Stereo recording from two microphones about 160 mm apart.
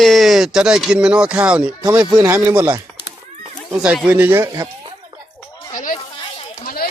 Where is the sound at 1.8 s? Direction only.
20° right (ahead or behind).